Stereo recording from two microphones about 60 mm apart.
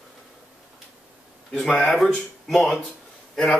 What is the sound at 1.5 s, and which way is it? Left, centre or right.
Speech, centre.